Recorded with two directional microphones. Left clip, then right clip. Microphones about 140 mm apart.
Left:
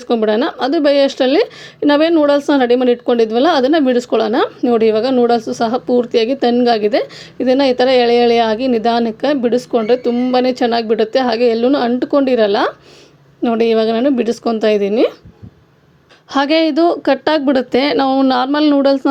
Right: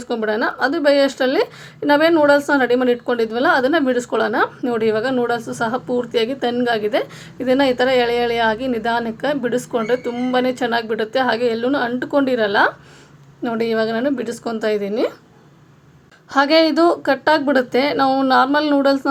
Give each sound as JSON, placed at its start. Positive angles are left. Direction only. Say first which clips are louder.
{"t": 0.0, "sound": "speech", "louder": "left 5 dB", "side_deg": 35}
{"t": 16.3, "sound": "speech", "louder": "left 1 dB", "side_deg": 35}